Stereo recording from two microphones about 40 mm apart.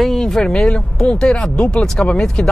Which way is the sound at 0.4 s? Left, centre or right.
Left.